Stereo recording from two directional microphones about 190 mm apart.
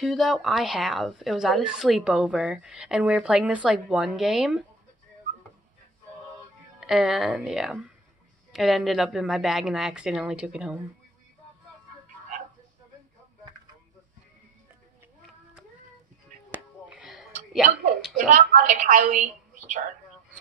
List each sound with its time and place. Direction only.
0.0 s speech: centre (ahead or behind)
6.8 s speech: 5° right (ahead or behind)
16.5 s a sound: 5° right (ahead or behind)
18.1 s a woman's voice: 45° right (ahead or behind)